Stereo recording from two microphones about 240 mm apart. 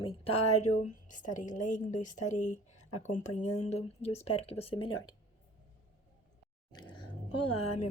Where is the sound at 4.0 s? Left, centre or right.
Left.